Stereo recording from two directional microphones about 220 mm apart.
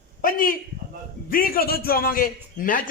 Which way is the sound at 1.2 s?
40° left (ahead or behind).